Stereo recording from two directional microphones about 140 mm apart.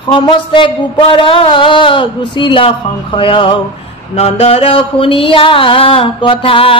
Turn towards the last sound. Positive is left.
turn(degrees=40)  # may be behind; listen again after turning